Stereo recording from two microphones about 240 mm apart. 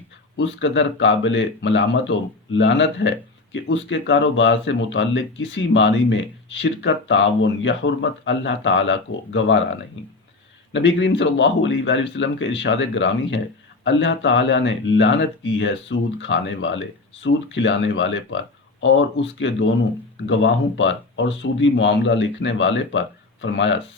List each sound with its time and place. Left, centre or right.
0.3 s speech: left
10.7 s speech: left